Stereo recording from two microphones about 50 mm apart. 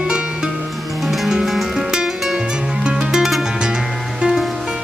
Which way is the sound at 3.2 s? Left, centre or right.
Centre.